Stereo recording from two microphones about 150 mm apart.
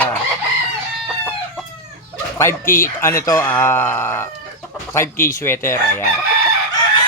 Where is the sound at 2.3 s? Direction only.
20° left (ahead or behind).